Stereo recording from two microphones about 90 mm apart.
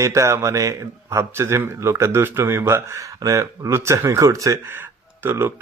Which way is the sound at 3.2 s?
40° right (ahead or behind).